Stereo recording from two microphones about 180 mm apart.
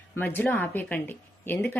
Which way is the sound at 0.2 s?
10° left (ahead or behind).